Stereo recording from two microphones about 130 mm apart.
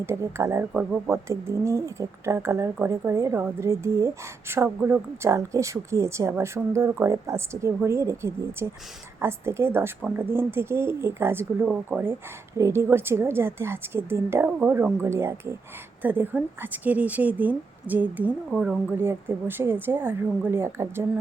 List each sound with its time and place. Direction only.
0.0 s a woman's voice: 20° right (ahead or behind)
0.7 s speech: 10° right (ahead or behind)
1.3 s a woman's voice: 20° right (ahead or behind)